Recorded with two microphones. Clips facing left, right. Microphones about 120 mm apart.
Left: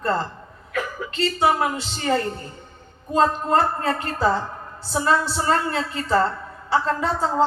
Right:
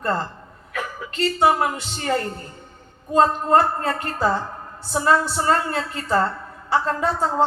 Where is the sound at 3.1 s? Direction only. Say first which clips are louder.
Right 2 dB; 45° right (ahead or behind).